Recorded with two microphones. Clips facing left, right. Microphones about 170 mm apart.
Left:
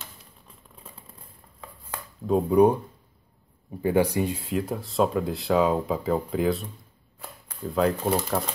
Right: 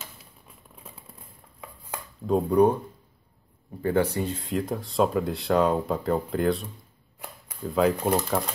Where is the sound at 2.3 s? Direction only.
5° left (ahead or behind).